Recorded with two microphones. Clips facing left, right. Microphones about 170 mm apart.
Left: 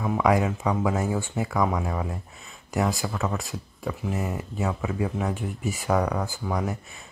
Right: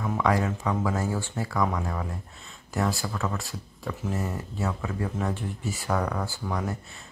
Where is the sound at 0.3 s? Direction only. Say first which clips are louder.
Left 3 dB; 10° left (ahead or behind).